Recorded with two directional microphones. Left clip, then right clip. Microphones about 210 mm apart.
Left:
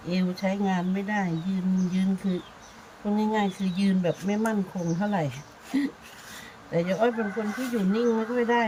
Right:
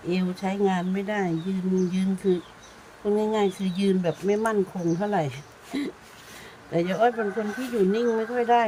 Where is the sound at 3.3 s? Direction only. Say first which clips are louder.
Right 3 dB; 30° right (ahead or behind).